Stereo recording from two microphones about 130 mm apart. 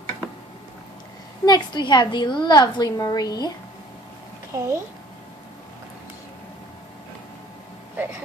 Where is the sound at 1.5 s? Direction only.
35° left (ahead or behind).